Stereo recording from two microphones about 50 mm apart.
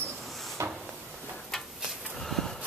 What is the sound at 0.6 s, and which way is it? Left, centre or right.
Drawer open or close, right.